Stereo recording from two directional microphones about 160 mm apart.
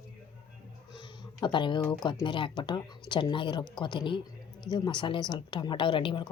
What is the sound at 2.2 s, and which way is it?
A woman's voice, 30° left (ahead or behind).